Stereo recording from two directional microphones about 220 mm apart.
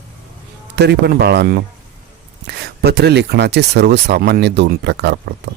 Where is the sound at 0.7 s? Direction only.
50° right (ahead or behind).